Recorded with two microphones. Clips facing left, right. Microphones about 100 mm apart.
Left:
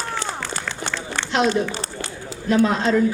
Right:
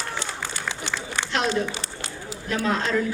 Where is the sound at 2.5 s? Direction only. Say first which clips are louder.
Left 7 dB; 20° left (ahead or behind).